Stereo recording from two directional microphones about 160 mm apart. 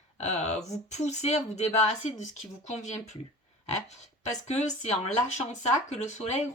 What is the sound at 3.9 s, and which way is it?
Speech, 45° left (ahead or behind).